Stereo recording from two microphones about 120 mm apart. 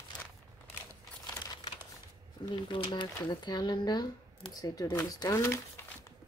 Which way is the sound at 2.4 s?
40° left (ahead or behind).